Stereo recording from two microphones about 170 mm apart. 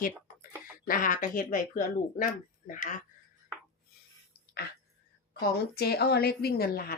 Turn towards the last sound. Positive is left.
turn(degrees=60)  # may be behind; listen again after turning